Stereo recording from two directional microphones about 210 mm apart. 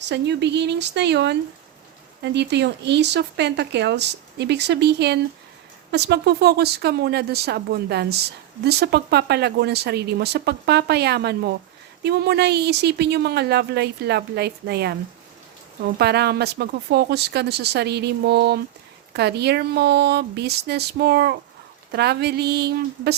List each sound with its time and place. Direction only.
0.0 s speech: 55° right (ahead or behind)